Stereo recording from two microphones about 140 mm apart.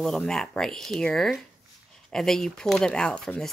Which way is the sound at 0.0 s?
5° left (ahead or behind).